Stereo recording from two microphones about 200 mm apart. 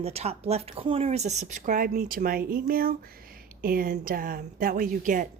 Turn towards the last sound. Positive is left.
turn(degrees=-40)  # may be behind; listen again after turning